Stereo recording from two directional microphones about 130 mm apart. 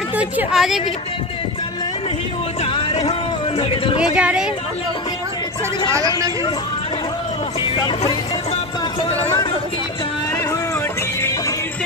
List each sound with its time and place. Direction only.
0.2 s a woman's voice: 5° right (ahead or behind)
2.6 s a sound: 50° left (ahead or behind)
4.0 s speech: 10° right (ahead or behind)